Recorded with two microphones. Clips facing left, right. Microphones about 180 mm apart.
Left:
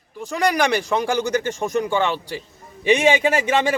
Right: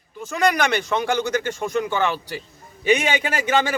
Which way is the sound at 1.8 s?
30° left (ahead or behind).